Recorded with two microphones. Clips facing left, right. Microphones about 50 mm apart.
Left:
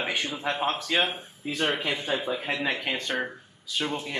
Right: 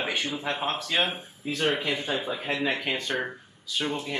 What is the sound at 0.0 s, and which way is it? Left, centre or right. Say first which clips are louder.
Speech: even; centre.